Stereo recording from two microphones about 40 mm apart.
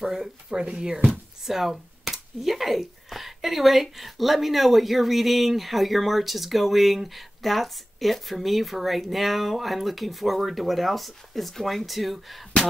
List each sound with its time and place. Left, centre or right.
0.0 s speech: centre
1.4 s speech: centre